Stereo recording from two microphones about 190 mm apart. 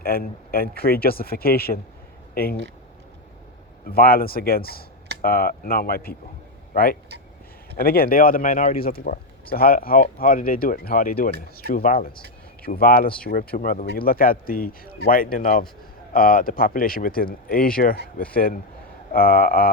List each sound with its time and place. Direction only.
0.0 s speech: 50° left (ahead or behind)
3.8 s speech: 50° left (ahead or behind)
7.8 s speech: 50° left (ahead or behind)